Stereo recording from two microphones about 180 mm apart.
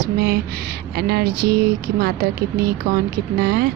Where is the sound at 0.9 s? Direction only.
60° right (ahead or behind).